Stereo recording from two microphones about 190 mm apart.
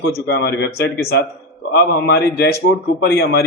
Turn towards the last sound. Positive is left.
turn(degrees=60)  # may be behind; listen again after turning